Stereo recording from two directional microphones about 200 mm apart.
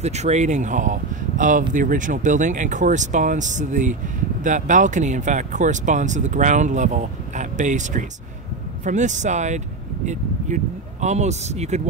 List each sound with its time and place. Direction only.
0.0 s speech: 35° right (ahead or behind)